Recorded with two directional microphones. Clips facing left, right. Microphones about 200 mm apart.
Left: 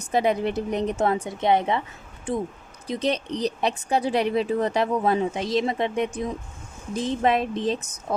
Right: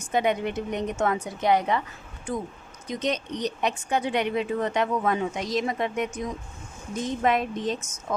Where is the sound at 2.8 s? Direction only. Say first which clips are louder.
Left 3 dB; 30° left (ahead or behind).